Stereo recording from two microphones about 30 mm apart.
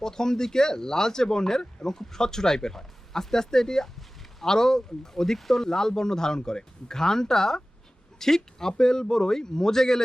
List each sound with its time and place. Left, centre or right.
0.0 s speech: centre